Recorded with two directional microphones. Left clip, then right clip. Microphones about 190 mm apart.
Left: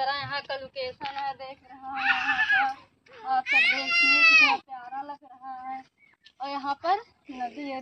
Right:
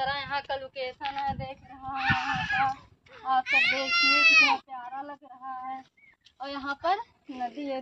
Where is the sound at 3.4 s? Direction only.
60° right (ahead or behind).